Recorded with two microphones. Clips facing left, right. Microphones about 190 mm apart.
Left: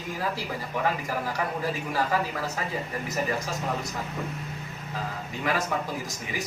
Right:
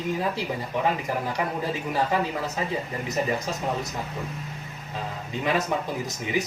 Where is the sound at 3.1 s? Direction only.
20° right (ahead or behind).